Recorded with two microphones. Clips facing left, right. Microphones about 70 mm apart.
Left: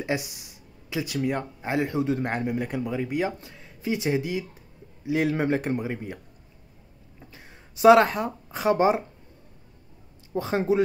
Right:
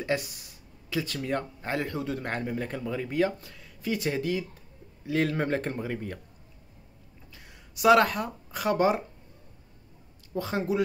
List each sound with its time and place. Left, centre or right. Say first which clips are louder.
0.0 s speech: left 1 dB; centre
7.3 s speech: right 1 dB; left
10.3 s speech: left 4 dB; left